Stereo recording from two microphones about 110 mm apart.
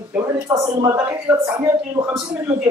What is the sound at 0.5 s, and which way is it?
Speech, 30° right (ahead or behind).